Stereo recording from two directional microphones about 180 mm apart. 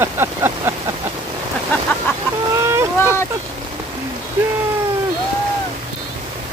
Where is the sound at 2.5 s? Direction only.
15° right (ahead or behind).